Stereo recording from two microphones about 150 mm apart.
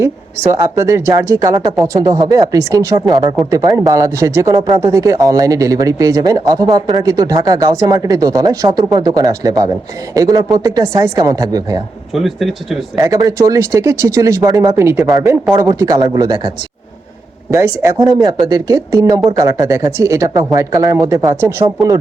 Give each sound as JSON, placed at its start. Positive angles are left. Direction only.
{"t": 0.0, "sound": "speech", "side_deg": -20}
{"t": 12.1, "sound": "speech", "side_deg": 0}
{"t": 13.0, "sound": "speech", "side_deg": -25}
{"t": 17.5, "sound": "speech", "side_deg": -20}